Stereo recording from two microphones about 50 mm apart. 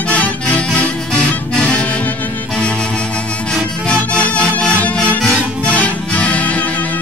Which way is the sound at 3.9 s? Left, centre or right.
Left.